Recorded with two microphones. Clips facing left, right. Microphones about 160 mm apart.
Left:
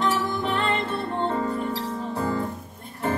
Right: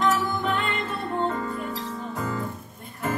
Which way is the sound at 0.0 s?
35° left (ahead or behind).